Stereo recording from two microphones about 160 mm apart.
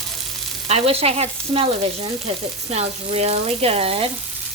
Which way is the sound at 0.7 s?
40° right (ahead or behind).